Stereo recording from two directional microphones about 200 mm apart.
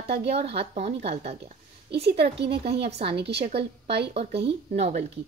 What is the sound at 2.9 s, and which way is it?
Speech, 30° right (ahead or behind).